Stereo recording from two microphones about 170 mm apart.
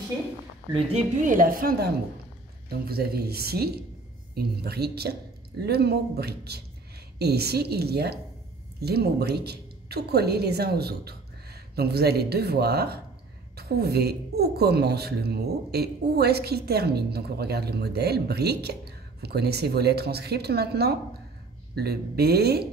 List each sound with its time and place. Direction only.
0.9 s a woman's voice: 50° right (ahead or behind)
2.9 s speech: 65° right (ahead or behind)